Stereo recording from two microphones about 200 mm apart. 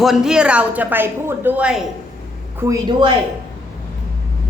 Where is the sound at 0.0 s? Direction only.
Centre (ahead or behind).